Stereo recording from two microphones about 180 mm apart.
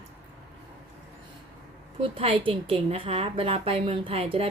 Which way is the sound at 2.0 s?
30° right (ahead or behind).